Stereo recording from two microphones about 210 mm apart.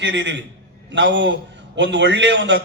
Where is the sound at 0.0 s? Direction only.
60° right (ahead or behind).